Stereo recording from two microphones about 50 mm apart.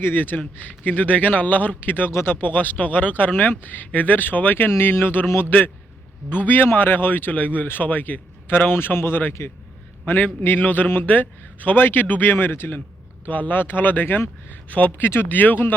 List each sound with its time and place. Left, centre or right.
0.0 s speech: left
4.7 s speech: left
13.2 s speech: left